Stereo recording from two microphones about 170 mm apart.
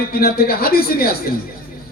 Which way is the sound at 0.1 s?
65° left (ahead or behind).